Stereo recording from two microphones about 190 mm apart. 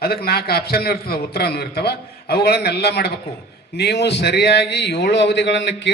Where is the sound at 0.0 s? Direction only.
55° left (ahead or behind).